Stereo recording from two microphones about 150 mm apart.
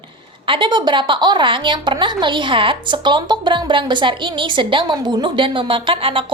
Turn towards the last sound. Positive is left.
turn(degrees=-35)  # may be behind; listen again after turning